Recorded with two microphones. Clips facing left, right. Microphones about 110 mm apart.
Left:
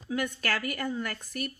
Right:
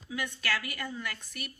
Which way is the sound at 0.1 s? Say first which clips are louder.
Left 4 dB; 45° left (ahead or behind).